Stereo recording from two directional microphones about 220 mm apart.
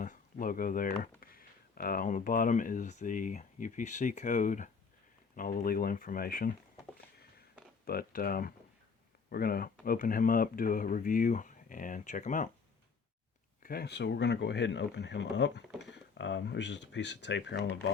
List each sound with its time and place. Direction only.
0.0 s speech: 40° left (ahead or behind)
7.9 s speech: 40° left (ahead or behind)
13.6 s speech: 45° left (ahead or behind)